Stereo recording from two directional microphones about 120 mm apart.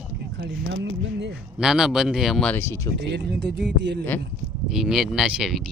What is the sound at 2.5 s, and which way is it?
Speech, 20° left (ahead or behind).